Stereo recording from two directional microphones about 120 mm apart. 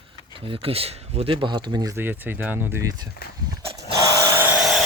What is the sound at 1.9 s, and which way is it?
Speech, 15° right (ahead or behind).